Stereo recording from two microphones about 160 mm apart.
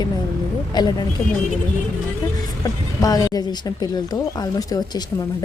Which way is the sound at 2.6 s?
25° left (ahead or behind).